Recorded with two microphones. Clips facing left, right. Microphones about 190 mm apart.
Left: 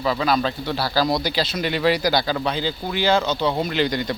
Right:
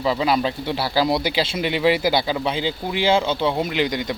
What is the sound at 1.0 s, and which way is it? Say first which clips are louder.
Speech: right 1 dB; 10° right (ahead or behind).